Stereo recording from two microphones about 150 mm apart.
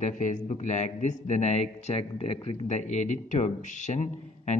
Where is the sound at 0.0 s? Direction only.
55° left (ahead or behind).